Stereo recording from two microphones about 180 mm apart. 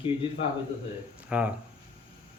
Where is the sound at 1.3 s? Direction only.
5° right (ahead or behind).